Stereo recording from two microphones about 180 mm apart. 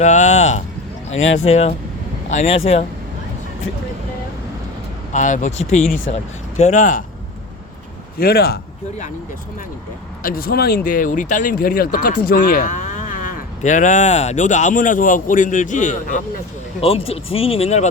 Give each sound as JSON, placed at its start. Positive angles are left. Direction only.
{"t": 0.0, "sound": "speech", "side_deg": 40}
{"t": 5.1, "sound": "speech", "side_deg": 45}
{"t": 8.2, "sound": "speech", "side_deg": 60}
{"t": 10.2, "sound": "speech", "side_deg": 55}
{"t": 16.8, "sound": "speech", "side_deg": 30}